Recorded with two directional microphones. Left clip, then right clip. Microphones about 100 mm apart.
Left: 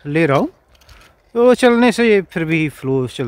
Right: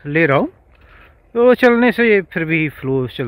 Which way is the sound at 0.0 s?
35° left (ahead or behind).